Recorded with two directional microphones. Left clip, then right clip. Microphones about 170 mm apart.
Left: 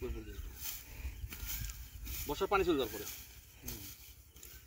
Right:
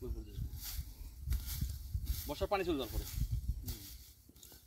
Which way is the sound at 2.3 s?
45° right (ahead or behind).